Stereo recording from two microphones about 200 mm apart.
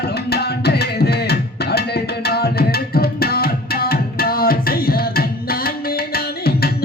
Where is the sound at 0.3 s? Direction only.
55° left (ahead or behind).